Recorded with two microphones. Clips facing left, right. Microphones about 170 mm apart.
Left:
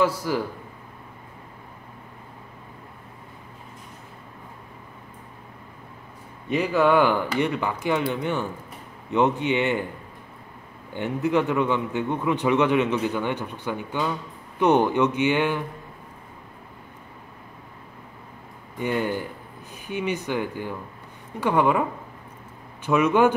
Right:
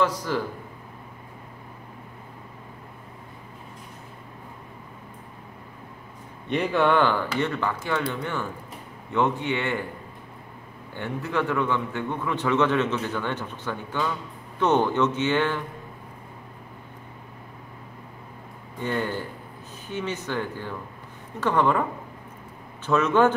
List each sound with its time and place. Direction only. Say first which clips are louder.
0.0 s a man's voice: left 2 dB; 10° left (ahead or behind)
6.5 s a man's voice: left 2 dB; 5° left (ahead or behind)
11.0 s a man's voice: left 5 dB; 15° left (ahead or behind)
18.8 s a man's voice: left 2 dB; 15° left (ahead or behind)
22.8 s a man's voice: left 1 dB; 10° left (ahead or behind)